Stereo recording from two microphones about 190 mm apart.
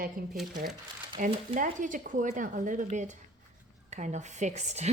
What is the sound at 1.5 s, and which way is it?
A woman's voice, 40° right (ahead or behind).